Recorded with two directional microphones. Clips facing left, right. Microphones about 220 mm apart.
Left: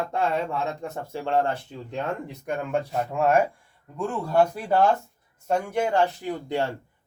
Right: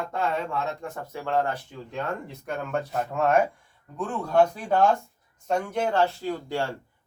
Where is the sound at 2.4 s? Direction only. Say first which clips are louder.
Left 3 dB; 10° left (ahead or behind).